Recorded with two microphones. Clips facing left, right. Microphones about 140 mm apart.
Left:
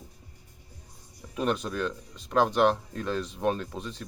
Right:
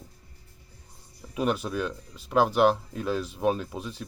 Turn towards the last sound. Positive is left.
turn(degrees=-5)  # may be behind; listen again after turning